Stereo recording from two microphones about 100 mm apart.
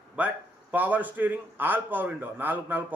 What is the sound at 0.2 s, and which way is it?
A man's voice, 15° right (ahead or behind).